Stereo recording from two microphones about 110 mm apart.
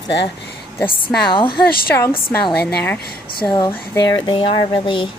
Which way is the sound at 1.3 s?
50° left (ahead or behind).